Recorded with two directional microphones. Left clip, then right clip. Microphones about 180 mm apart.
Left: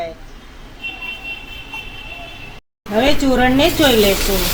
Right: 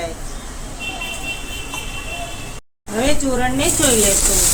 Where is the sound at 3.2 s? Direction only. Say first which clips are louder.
Left 4 dB; 45° left (ahead or behind).